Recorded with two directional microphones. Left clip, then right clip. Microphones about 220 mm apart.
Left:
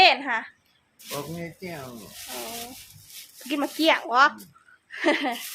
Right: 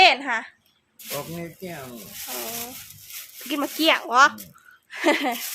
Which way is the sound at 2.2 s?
30° right (ahead or behind).